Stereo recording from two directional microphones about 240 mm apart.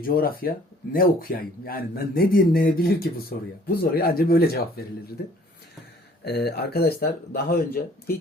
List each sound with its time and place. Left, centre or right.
0.0 s a man's voice: left
6.2 s a man's voice: left